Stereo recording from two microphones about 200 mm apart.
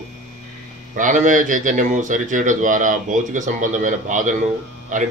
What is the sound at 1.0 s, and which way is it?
Speech, 40° right (ahead or behind).